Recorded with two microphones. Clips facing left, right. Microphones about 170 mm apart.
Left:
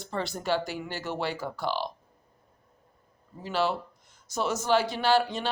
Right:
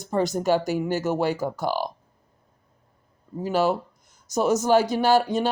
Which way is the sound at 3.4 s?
45° right (ahead or behind).